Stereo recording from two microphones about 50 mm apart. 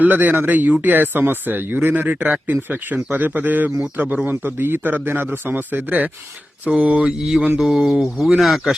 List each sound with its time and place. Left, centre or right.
0.0 s speech: right
4.3 s speech: right
6.7 s mantra: right
7.6 s speech: centre